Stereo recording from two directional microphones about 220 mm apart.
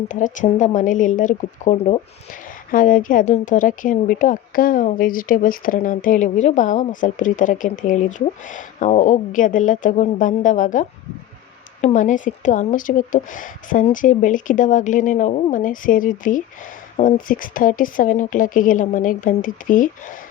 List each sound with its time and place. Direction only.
0.1 s speech: 35° left (ahead or behind)